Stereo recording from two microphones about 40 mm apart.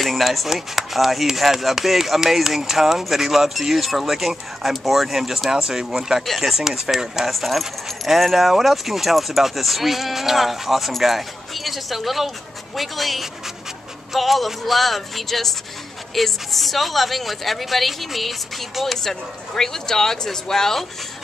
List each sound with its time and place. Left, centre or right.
0.0 s speech: centre
6.2 s speech: centre
7.2 s speech: centre
19.0 s speech: centre